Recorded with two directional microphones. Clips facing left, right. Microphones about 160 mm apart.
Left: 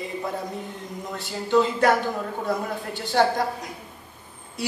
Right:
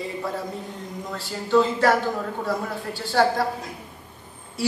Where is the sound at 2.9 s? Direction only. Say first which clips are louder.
Right 1 dB; 20° left (ahead or behind).